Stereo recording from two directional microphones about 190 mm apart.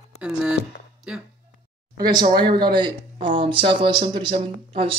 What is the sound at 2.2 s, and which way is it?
Speech, 25° right (ahead or behind).